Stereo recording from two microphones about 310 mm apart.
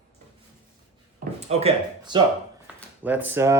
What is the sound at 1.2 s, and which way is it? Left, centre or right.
Speech, right.